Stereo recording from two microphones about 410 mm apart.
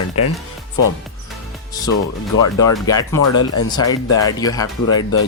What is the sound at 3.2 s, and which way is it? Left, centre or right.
Speech, left.